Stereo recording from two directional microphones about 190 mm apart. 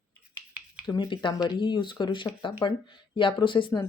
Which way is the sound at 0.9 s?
20° left (ahead or behind).